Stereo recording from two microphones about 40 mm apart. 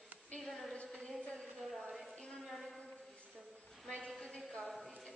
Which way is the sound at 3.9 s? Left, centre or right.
Centre.